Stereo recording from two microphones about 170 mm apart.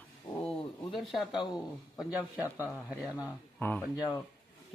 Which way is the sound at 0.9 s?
Centre (ahead or behind).